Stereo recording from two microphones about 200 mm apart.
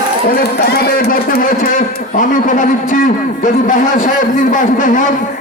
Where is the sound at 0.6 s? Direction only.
50° left (ahead or behind).